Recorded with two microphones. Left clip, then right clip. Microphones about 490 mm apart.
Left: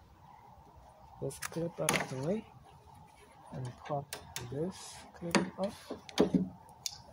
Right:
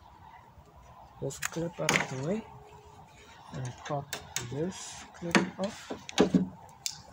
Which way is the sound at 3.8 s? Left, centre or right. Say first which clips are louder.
Right 3 dB; left.